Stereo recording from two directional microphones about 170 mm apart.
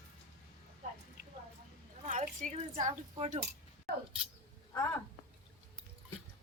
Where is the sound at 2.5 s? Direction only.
45° right (ahead or behind).